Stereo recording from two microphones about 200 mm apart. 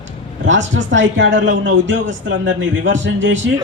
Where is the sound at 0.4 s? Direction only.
65° right (ahead or behind).